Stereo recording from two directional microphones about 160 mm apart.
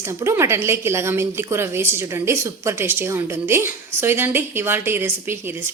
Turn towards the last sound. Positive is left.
turn(degrees=-15)  # may be behind; listen again after turning